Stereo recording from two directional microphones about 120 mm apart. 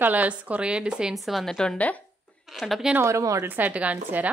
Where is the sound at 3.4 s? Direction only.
15° right (ahead or behind).